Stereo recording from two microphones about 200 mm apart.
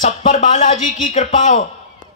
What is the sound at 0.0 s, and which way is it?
Speech, 35° left (ahead or behind).